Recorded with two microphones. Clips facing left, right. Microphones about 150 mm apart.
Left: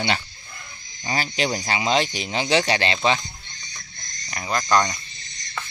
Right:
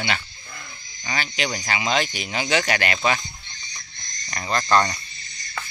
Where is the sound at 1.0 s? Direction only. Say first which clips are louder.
Left 3 dB; 35° left (ahead or behind).